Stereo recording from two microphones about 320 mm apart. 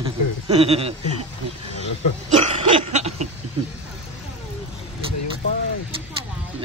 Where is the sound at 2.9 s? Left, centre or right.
Right.